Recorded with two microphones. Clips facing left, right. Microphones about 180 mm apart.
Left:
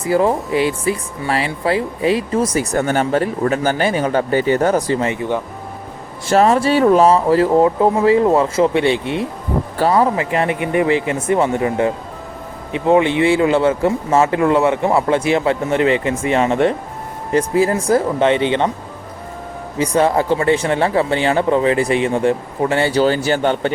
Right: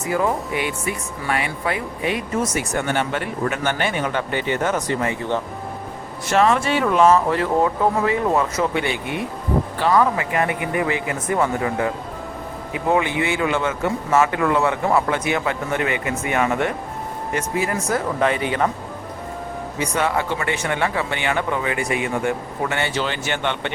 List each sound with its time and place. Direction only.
0.0 s speech: 35° left (ahead or behind)
6.2 s speech: 35° left (ahead or behind)
19.8 s speech: 35° left (ahead or behind)